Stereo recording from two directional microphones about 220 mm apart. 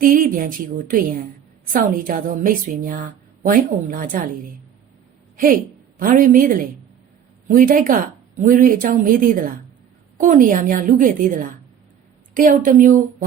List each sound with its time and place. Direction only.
0.0 s speech: 40° right (ahead or behind)
6.0 s speech: 40° right (ahead or behind)